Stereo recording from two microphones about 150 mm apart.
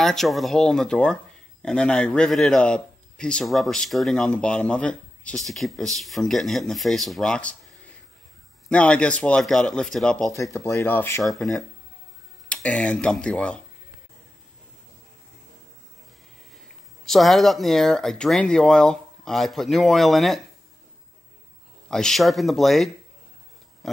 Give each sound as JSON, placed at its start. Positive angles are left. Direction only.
{"t": 0.0, "sound": "a man's voice", "side_deg": 0}
{"t": 8.6, "sound": "a man's voice", "side_deg": 10}
{"t": 10.3, "sound": "speech", "side_deg": 20}
{"t": 11.2, "sound": "a man's voice", "side_deg": 0}
{"t": 17.0, "sound": "a man's voice", "side_deg": 0}
{"t": 21.8, "sound": "a man's voice", "side_deg": 5}